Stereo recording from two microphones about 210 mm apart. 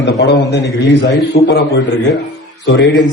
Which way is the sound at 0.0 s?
55° left (ahead or behind).